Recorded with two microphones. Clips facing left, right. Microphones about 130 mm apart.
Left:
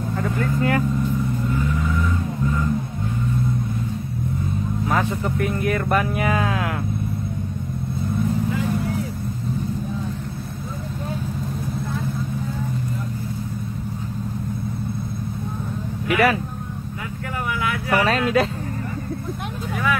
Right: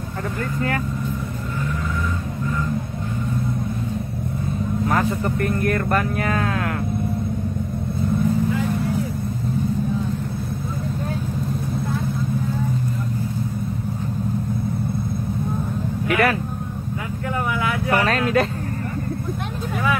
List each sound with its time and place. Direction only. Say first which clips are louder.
4.8 s speech: right 1 dB; 5° left (ahead or behind)
16.1 s speech: left 1 dB; centre (ahead or behind)
17.8 s speech: left 1 dB; centre (ahead or behind)